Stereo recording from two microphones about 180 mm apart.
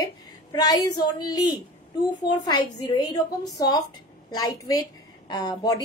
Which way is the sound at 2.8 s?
20° left (ahead or behind).